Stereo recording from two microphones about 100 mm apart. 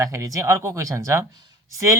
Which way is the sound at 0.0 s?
35° right (ahead or behind).